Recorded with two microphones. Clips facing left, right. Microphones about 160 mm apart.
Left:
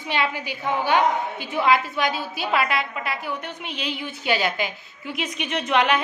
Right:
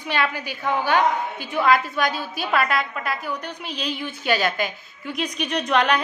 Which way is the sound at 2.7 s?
45° right (ahead or behind).